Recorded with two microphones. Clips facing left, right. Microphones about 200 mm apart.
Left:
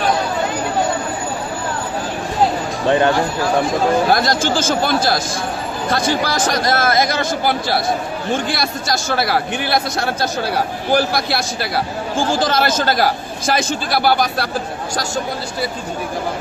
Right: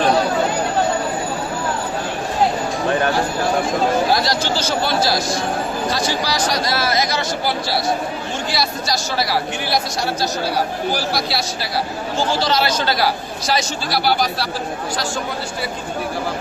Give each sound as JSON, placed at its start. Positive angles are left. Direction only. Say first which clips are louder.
{"t": 4.1, "sound": "speech", "louder": "left 3 dB", "side_deg": 50}